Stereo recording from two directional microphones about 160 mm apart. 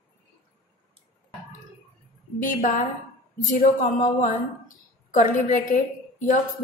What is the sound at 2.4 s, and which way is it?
Speech, 60° left (ahead or behind).